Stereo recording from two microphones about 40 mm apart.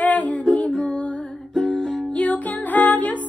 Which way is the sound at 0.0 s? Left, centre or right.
Left.